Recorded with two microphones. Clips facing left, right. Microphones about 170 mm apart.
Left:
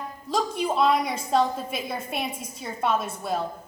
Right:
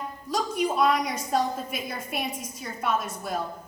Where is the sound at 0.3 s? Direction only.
25° left (ahead or behind).